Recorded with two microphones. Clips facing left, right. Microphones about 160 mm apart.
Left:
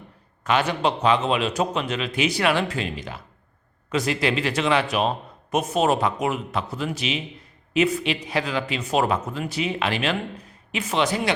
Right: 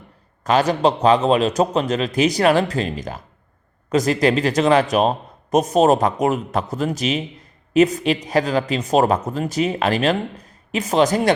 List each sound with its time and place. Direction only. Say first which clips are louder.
0.4 s a man's voice: right 5 dB; 40° right (ahead or behind)